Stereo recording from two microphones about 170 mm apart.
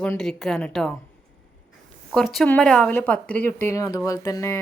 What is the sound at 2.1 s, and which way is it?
Speech, centre (ahead or behind).